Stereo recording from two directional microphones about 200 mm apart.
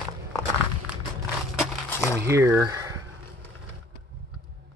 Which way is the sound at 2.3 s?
15° right (ahead or behind).